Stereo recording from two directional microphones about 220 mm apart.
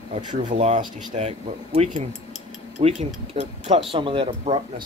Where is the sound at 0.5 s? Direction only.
30° right (ahead or behind).